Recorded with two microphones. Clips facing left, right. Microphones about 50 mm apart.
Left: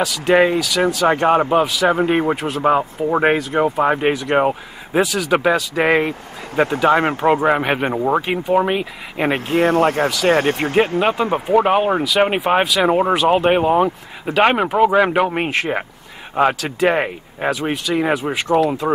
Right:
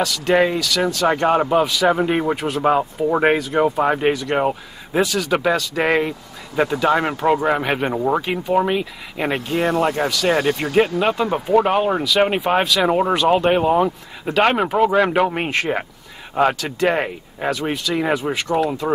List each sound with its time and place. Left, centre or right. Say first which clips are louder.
0.0 s speech: left 2 dB; centre
2.6 s speech: left 1 dB; centre
6.6 s speech: left 2 dB; left
7.3 s speech: left 2 dB; centre
9.5 s speech: left 4 dB; left
11.0 s speech: left 2 dB; left